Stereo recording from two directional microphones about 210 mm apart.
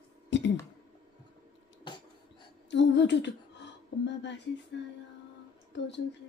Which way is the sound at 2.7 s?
55° left (ahead or behind).